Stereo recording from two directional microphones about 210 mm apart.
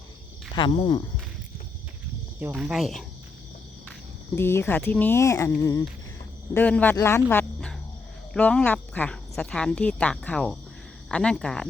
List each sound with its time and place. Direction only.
0.5 s speech: 25° left (ahead or behind)
2.4 s speech: 5° right (ahead or behind)
4.4 s speech: 10° left (ahead or behind)
6.9 s a sound: 10° left (ahead or behind)
8.3 s speech: 5° left (ahead or behind)